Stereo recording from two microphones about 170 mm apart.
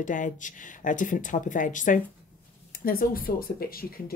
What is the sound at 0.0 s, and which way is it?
A woman's voice, 50° left (ahead or behind).